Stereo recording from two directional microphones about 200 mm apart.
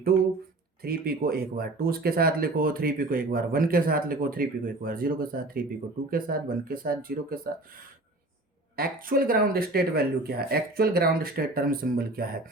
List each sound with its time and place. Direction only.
0.8 s speech: 50° right (ahead or behind)
8.7 s speech: 45° right (ahead or behind)